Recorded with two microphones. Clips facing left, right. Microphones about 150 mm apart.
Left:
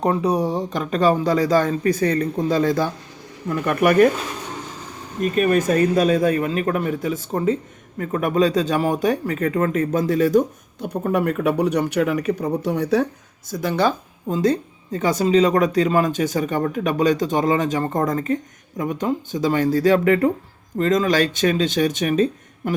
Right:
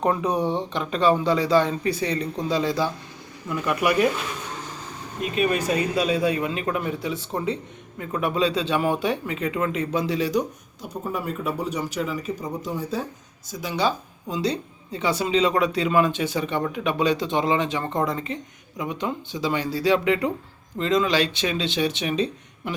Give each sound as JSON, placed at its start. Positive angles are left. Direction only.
{"t": 0.0, "sound": "speech", "side_deg": 35}
{"t": 5.2, "sound": "speech", "side_deg": 45}
{"t": 13.5, "sound": "speech", "side_deg": 55}